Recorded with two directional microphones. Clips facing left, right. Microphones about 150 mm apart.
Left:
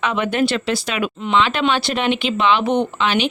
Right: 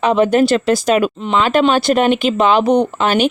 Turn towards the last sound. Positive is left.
turn(degrees=-45)  # may be behind; listen again after turning